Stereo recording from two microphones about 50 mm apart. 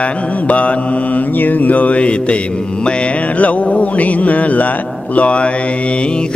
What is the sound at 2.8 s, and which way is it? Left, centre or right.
Speech, left.